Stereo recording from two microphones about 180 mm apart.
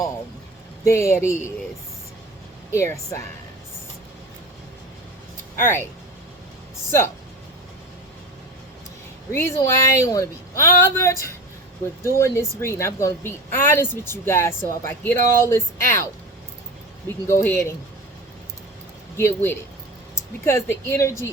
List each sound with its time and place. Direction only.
0.9 s a woman's voice: 15° left (ahead or behind)
2.7 s a woman's voice: 15° left (ahead or behind)
5.5 s a woman's voice: 10° left (ahead or behind)
9.3 s a woman's voice: 15° left (ahead or behind)
17.1 s a woman's voice: 15° left (ahead or behind)
19.1 s a woman's voice: 15° left (ahead or behind)